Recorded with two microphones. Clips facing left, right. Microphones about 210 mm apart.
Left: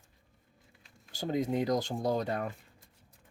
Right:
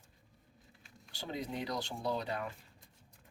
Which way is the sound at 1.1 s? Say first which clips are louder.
Left 9 dB; 45° left (ahead or behind).